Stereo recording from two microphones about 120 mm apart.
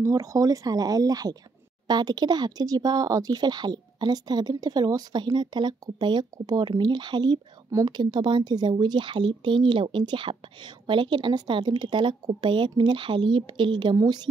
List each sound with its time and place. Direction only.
0.0 s speech: 25° right (ahead or behind)